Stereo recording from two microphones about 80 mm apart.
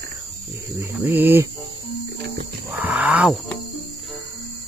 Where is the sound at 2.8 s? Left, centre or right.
Centre.